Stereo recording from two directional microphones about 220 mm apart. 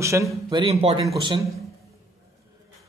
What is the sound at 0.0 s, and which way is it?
Speech, 15° right (ahead or behind).